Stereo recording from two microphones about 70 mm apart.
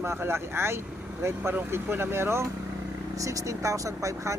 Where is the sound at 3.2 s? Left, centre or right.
Right.